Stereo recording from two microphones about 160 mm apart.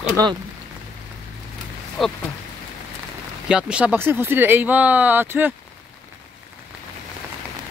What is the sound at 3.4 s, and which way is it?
Speech, 5° right (ahead or behind).